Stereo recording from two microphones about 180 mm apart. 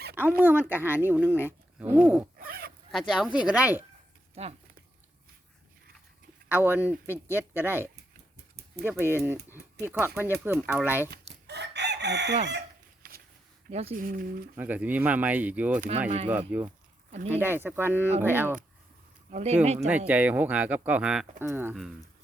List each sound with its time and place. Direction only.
0.2 s speech: 10° right (ahead or behind)
2.4 s zipper: 60° right (ahead or behind)
2.9 s speech: 5° right (ahead or behind)
6.5 s speech: 10° right (ahead or behind)
11.4 s chicken: 70° right (ahead or behind)
13.7 s speech: 35° right (ahead or behind)
14.0 s speech: 55° right (ahead or behind)
14.5 s speech: 10° right (ahead or behind)
16.0 s speech: 35° right (ahead or behind)
16.5 s speech: 10° right (ahead or behind)
17.1 s speech: 40° right (ahead or behind)
17.3 s speech: 10° right (ahead or behind)
19.3 s speech: 40° right (ahead or behind)
20.1 s speech: 10° right (ahead or behind)